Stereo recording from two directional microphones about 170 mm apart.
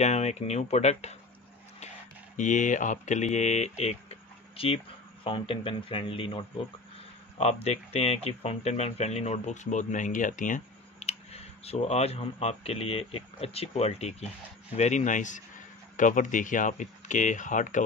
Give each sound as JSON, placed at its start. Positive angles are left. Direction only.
{"t": 0.0, "sound": "speech", "side_deg": 40}
{"t": 2.3, "sound": "speech", "side_deg": 45}